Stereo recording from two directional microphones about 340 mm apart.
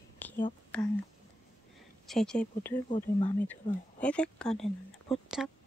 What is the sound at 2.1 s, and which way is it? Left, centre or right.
Speech, centre.